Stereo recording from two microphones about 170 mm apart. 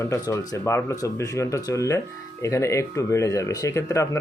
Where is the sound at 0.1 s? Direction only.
20° left (ahead or behind).